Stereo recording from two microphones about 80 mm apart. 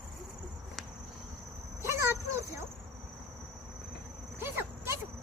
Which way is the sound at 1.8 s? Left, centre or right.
Right.